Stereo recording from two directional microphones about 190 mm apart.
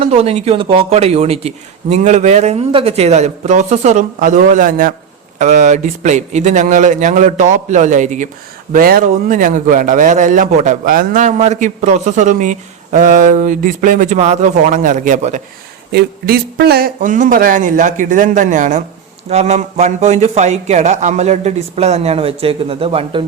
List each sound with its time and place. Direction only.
0.0 s a man's voice: 35° right (ahead or behind)
15.9 s a man's voice: 55° right (ahead or behind); by 23.2 s 30° right (ahead or behind)